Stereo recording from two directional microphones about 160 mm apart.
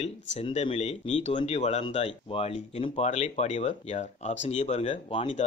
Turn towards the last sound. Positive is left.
turn(degrees=35)  # may be behind; listen again after turning